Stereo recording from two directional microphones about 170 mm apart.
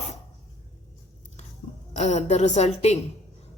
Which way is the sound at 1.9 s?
40° left (ahead or behind).